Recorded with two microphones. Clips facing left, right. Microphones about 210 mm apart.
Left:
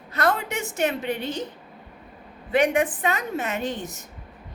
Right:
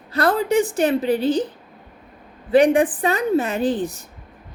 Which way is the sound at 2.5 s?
35° right (ahead or behind).